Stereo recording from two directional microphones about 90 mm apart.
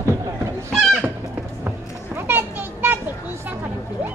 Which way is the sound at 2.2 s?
25° right (ahead or behind).